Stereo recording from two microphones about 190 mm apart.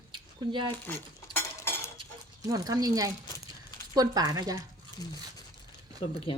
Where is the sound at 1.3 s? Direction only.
15° left (ahead or behind).